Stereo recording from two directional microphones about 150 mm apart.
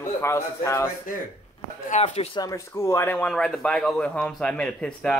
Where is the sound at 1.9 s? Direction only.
50° left (ahead or behind).